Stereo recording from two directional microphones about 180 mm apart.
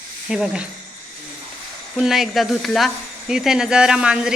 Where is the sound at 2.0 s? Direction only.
Centre (ahead or behind).